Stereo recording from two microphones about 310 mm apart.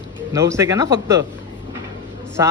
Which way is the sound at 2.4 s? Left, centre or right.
Centre.